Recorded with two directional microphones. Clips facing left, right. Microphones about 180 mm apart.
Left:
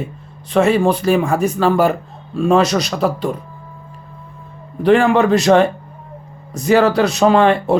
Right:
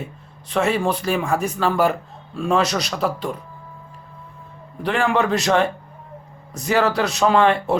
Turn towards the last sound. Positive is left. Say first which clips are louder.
# left 4 dB
turn(degrees=40)  # may be behind; listen again after turning